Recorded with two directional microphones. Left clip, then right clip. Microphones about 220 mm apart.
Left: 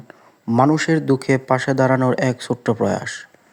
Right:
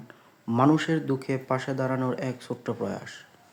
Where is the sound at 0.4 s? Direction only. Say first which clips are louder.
Left 7 dB; 25° left (ahead or behind).